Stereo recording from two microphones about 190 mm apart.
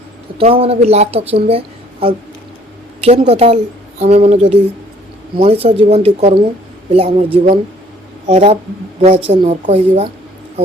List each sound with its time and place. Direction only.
0.3 s a woman's voice: 30° right (ahead or behind)